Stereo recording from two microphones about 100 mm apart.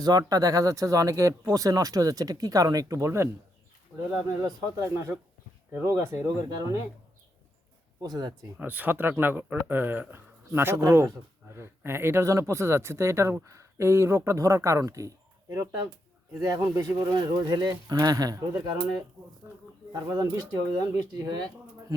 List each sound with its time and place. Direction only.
0.0 s speech: 40° right (ahead or behind)
3.9 s speech: 5° right (ahead or behind)
4.4 s speech: 35° right (ahead or behind)
6.2 s speech: 40° right (ahead or behind)
8.0 s speech: 40° right (ahead or behind)
8.5 s speech: 15° right (ahead or behind); by 18.4 s 40° right (ahead or behind)
19.9 s speech: 35° right (ahead or behind)
21.3 s speech: 45° right (ahead or behind)